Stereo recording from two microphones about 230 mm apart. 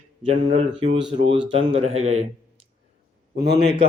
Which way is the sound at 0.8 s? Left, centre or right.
Right.